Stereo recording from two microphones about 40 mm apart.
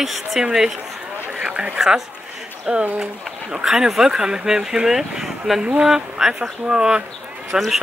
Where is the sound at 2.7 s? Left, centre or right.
Centre.